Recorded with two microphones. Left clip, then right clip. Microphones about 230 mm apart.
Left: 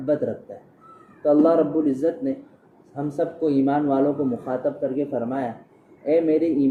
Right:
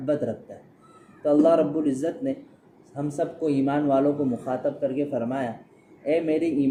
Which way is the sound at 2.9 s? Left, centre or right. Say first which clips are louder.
Left 3 dB; right.